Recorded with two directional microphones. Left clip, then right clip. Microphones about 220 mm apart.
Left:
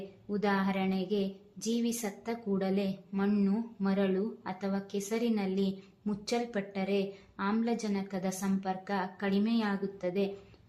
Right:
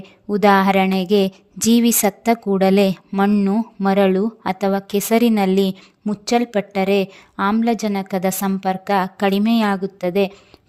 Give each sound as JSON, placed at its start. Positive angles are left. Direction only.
{"t": 0.3, "sound": "a woman's voice", "side_deg": -50}